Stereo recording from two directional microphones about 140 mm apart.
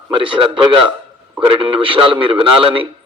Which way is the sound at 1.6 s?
40° right (ahead or behind).